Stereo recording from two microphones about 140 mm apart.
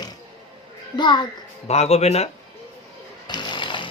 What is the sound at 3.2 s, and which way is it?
Music, 30° left (ahead or behind).